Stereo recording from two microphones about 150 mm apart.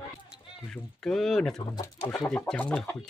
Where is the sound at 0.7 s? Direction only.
Centre (ahead or behind).